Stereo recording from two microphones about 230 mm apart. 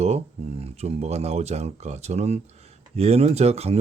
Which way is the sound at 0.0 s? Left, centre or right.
Right.